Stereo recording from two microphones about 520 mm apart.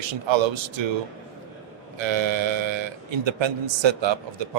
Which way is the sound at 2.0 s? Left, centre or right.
Right.